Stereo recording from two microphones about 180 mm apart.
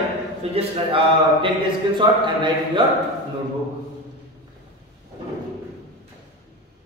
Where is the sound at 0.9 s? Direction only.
25° right (ahead or behind).